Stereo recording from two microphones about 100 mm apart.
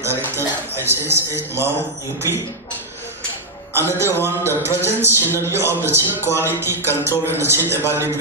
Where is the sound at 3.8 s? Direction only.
25° right (ahead or behind).